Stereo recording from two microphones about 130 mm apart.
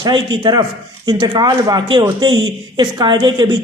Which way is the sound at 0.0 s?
35° right (ahead or behind).